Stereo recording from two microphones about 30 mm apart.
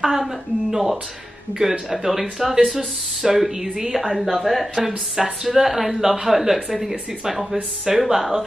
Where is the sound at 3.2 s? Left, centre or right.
Centre.